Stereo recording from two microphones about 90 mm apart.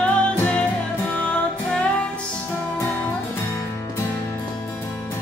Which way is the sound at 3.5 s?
30° left (ahead or behind).